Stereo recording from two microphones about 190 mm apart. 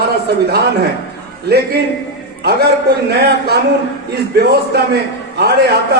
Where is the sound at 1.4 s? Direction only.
60° right (ahead or behind).